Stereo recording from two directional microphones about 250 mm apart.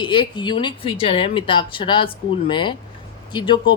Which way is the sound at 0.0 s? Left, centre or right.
Centre.